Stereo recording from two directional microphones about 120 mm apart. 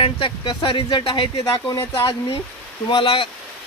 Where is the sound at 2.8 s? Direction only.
45° left (ahead or behind).